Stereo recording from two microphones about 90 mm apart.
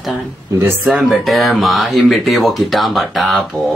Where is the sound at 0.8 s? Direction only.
Centre (ahead or behind).